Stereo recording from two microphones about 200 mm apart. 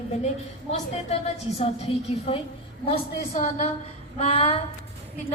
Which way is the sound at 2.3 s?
30° left (ahead or behind).